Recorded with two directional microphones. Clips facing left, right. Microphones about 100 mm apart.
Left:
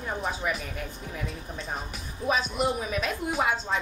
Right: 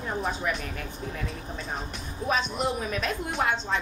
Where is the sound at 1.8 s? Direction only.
5° left (ahead or behind).